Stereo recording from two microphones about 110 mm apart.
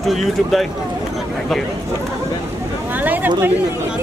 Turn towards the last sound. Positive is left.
turn(degrees=-15)  # may be behind; listen again after turning